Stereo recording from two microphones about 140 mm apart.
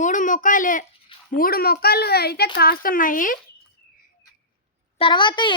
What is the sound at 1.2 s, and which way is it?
Speech, 90° left.